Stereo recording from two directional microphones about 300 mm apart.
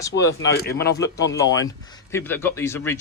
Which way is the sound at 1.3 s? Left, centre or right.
Centre.